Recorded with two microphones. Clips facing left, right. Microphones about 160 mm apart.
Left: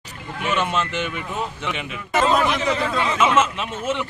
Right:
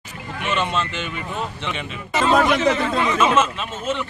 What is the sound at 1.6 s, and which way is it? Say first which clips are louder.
Speech: even; 10° left (ahead or behind).